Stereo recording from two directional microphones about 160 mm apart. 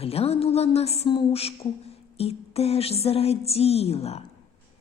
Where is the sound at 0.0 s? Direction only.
40° left (ahead or behind).